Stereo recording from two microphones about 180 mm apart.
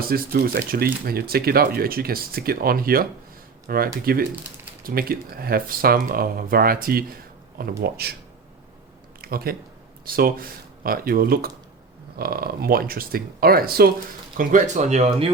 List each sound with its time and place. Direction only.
0.1 s speech: 55° right (ahead or behind)
9.2 s speech: 55° right (ahead or behind)
14.3 s speech: 40° right (ahead or behind)